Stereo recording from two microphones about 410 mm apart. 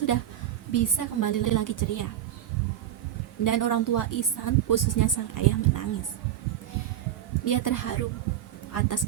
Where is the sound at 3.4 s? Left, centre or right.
Left.